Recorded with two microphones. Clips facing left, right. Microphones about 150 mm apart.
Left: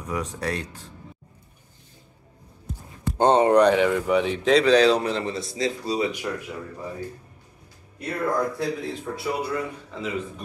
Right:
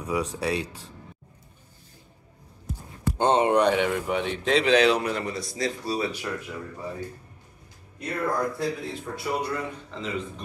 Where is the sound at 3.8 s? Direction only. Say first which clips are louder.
Left 5 dB; 90° left.